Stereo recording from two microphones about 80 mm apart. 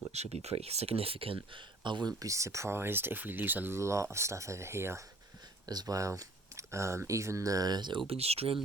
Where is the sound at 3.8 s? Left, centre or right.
Right.